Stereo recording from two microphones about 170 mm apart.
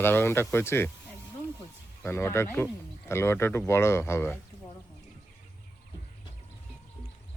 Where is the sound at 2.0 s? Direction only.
15° left (ahead or behind).